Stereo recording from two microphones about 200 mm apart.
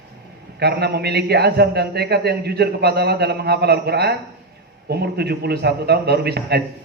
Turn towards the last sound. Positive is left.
turn(degrees=-55)  # may be behind; listen again after turning